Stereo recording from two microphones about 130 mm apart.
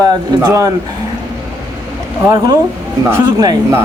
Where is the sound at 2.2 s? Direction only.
25° right (ahead or behind).